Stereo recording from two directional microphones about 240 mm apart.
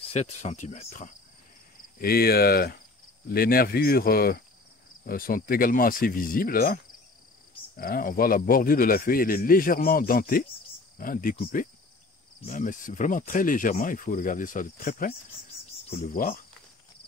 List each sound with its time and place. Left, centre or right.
0.0 s speech: left
2.0 s speech: left